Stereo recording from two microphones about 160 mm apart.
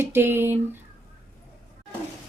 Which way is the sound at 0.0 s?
15° right (ahead or behind).